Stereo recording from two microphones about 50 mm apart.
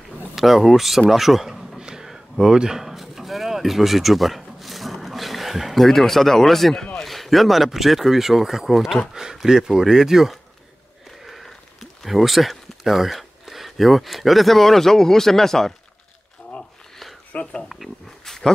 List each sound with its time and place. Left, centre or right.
0.4 s speech: centre
1.8 s a sound: centre
7.1 s speech: centre
11.1 s a sound: centre
12.0 s speech: centre
17.3 s speech: left
17.6 s speech: centre